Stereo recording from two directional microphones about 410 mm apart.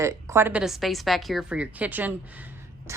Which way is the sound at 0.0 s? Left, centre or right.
Centre.